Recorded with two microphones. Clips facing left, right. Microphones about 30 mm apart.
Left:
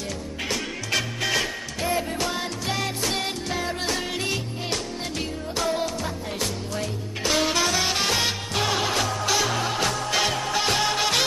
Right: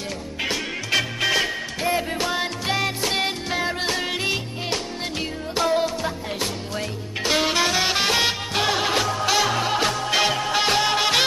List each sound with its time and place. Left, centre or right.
0.5 s music: centre